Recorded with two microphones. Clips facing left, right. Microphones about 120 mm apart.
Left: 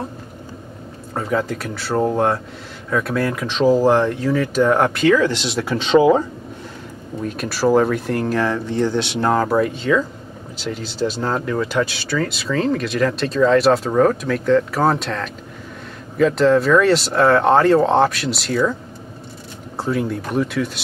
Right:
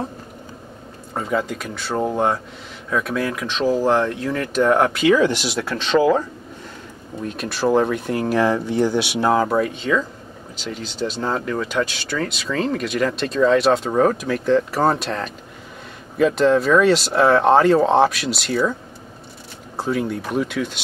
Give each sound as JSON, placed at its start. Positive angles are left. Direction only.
{"t": 1.1, "sound": "speech", "side_deg": 0}
{"t": 3.5, "sound": "speech", "side_deg": 15}
{"t": 5.1, "sound": "speech", "side_deg": -15}
{"t": 5.6, "sound": "speech", "side_deg": 15}
{"t": 7.2, "sound": "speech", "side_deg": 5}
{"t": 8.2, "sound": "speech", "side_deg": -15}
{"t": 16.2, "sound": "speech", "side_deg": -5}
{"t": 19.8, "sound": "speech", "side_deg": 0}